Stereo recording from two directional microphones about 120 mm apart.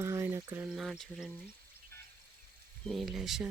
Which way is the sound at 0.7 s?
Centre (ahead or behind).